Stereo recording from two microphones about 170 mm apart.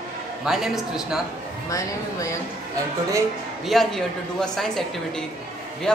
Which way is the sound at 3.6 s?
Centre (ahead or behind).